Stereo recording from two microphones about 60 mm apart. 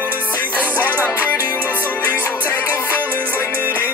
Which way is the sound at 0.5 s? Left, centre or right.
Right.